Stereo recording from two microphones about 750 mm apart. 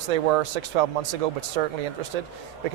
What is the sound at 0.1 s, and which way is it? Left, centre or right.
Speech, right.